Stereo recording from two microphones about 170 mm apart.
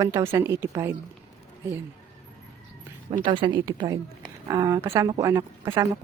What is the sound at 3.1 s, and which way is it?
Speech, 30° right (ahead or behind).